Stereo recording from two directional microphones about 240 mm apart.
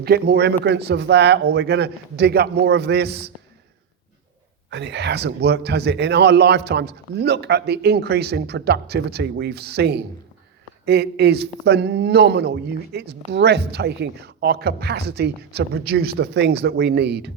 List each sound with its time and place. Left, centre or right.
0.0 s a man's voice: right
4.7 s a man's voice: right